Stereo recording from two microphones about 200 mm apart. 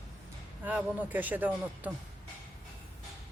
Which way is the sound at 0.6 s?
5° right (ahead or behind).